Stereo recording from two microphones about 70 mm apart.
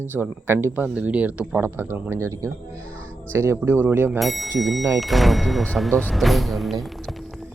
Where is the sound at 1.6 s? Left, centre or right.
Right.